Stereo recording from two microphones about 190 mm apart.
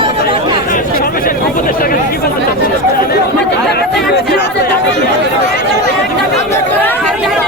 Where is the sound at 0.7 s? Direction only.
45° left (ahead or behind).